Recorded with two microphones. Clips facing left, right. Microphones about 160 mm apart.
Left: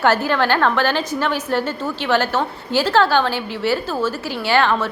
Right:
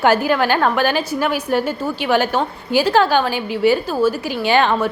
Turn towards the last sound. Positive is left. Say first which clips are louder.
# right 2 dB
turn(degrees=-15)  # may be behind; listen again after turning